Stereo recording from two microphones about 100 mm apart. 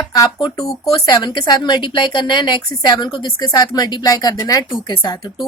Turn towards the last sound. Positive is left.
turn(degrees=55)  # may be behind; listen again after turning